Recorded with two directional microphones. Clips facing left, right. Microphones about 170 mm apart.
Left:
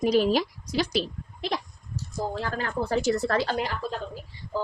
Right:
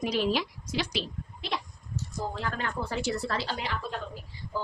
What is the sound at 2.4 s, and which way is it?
A woman's voice, 35° left (ahead or behind).